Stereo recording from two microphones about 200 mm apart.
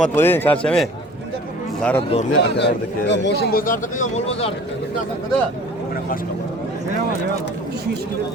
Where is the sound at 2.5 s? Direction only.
60° left (ahead or behind); by 4.5 s 30° left (ahead or behind).